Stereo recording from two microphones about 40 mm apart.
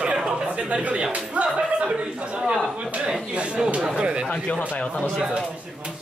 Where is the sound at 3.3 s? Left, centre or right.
Right.